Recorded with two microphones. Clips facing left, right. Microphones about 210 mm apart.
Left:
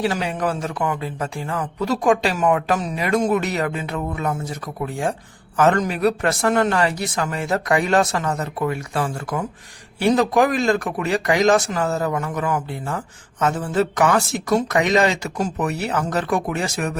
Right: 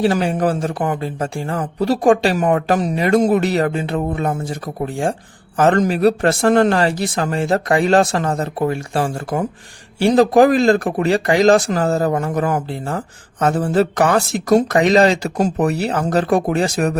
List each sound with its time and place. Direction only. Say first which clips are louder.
0.0 s speech: right 6 dB; 50° right (ahead or behind)
0.3 s speech: right 5 dB; 35° right (ahead or behind)